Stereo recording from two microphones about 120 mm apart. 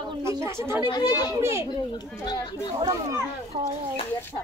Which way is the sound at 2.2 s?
35° left (ahead or behind).